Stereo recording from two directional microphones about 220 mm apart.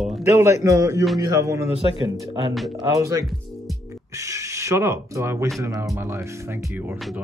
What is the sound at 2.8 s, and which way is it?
A man's voice, 15° right (ahead or behind).